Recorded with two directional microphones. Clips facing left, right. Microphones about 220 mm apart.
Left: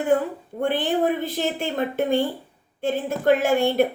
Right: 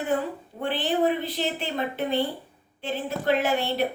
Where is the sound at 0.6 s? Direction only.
50° left (ahead or behind).